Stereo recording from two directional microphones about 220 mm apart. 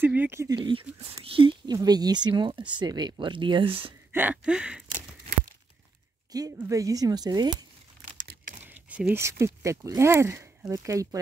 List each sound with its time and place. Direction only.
0.0 s speech: 10° right (ahead or behind); by 3.9 s 25° right (ahead or behind)
4.1 s speech: 10° right (ahead or behind)
6.3 s speech: 15° right (ahead or behind)
8.6 s a sound: 5° right (ahead or behind)
9.1 s speech: 10° right (ahead or behind)